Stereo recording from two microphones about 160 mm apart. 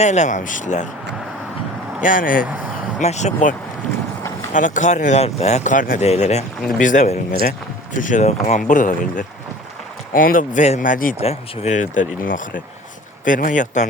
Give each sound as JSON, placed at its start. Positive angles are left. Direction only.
{"t": 0.0, "sound": "speech", "side_deg": 45}
{"t": 2.0, "sound": "speech", "side_deg": 55}
{"t": 3.0, "sound": "speech", "side_deg": 45}
{"t": 4.5, "sound": "speech", "side_deg": 50}
{"t": 11.2, "sound": "speech", "side_deg": 40}